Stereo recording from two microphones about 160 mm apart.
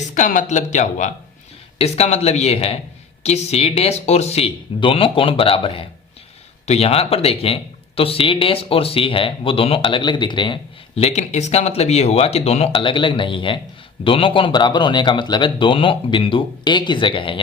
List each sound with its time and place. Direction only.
0.0 s speech: 50° left (ahead or behind); by 17.4 s 30° left (ahead or behind)